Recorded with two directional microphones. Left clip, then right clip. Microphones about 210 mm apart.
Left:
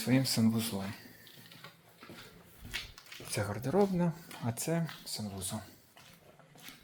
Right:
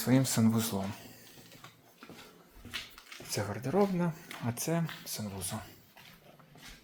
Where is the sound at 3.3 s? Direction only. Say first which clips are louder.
Even; 5° right (ahead or behind).